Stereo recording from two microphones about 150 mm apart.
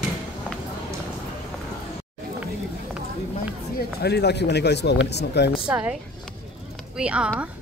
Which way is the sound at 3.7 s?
90° left.